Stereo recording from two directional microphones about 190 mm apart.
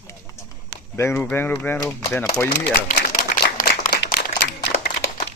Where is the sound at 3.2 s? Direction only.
60° left (ahead or behind).